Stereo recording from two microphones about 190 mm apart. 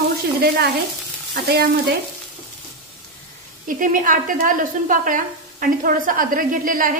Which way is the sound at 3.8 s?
45° right (ahead or behind).